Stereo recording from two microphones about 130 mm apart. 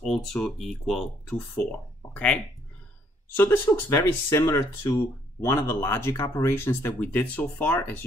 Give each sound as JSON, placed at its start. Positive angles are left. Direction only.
{"t": 0.0, "sound": "speech", "side_deg": 5}